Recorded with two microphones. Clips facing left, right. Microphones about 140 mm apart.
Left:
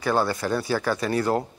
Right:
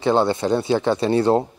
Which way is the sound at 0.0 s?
25° right (ahead or behind).